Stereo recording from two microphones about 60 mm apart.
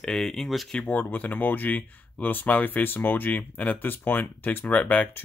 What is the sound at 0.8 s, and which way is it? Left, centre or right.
Speech, left.